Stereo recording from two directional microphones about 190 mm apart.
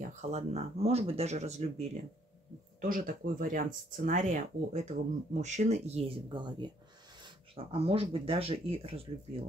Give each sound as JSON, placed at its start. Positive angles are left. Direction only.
{"t": 0.0, "sound": "speech", "side_deg": -40}
{"t": 2.8, "sound": "speech", "side_deg": -45}